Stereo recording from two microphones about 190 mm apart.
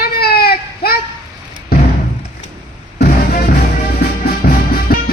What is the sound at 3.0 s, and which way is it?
Music, 55° left (ahead or behind).